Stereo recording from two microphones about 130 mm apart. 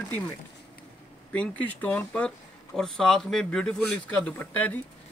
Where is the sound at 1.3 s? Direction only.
10° left (ahead or behind).